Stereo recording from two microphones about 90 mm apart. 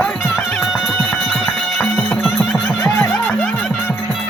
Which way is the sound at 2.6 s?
25° left (ahead or behind).